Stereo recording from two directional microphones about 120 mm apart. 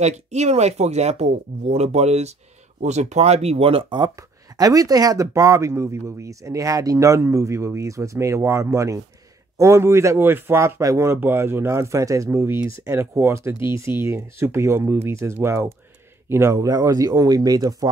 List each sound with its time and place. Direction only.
0.0 s speech: 65° right (ahead or behind)
3.9 s speech: 35° right (ahead or behind)